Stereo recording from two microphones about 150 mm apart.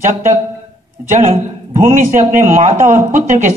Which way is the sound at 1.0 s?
50° right (ahead or behind).